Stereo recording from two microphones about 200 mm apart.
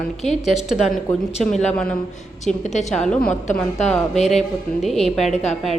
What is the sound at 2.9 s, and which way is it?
Speech, 5° left (ahead or behind).